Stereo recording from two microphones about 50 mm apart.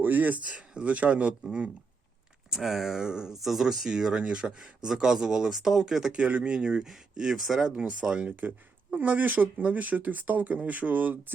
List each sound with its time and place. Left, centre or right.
0.0 s speech: right
0.7 s speech: right
2.5 s speech: centre
3.3 s speech: centre
6.1 s speech: right
7.3 s speech: centre
8.0 s speech: centre
9.0 s speech: right